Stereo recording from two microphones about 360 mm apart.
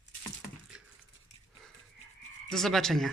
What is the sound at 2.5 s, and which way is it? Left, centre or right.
Speech, centre.